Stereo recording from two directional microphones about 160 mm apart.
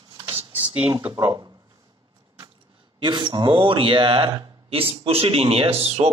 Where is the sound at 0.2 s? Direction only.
35° right (ahead or behind).